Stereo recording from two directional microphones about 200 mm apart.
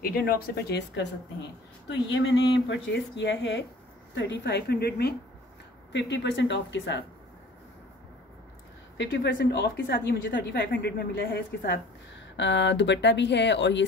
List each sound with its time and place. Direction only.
0.0 s a woman's voice: 50° left (ahead or behind)
8.9 s a woman's voice: 60° left (ahead or behind)
12.4 s speech: 65° left (ahead or behind)